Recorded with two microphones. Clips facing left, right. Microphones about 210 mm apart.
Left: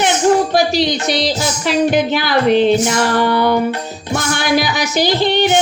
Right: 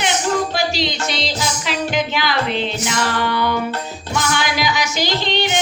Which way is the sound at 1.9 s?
50° left (ahead or behind).